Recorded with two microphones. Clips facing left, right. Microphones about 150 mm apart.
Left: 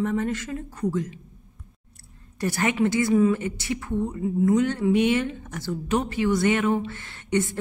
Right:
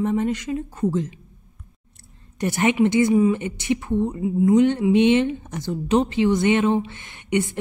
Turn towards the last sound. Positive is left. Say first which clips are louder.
# right 2 dB
turn(degrees=-15)  # may be behind; listen again after turning